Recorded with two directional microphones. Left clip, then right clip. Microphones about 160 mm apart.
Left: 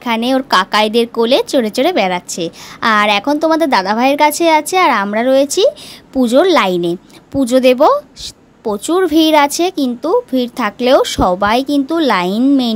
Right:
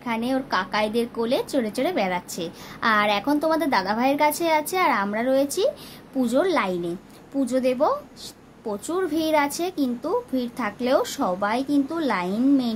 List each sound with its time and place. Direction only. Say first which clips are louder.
0.0 s a woman's voice: left 11 dB; 65° left (ahead or behind)